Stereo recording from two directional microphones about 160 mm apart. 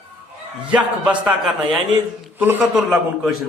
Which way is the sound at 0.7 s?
5° right (ahead or behind).